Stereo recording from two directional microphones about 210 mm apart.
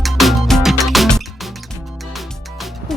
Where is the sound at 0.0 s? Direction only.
Centre (ahead or behind).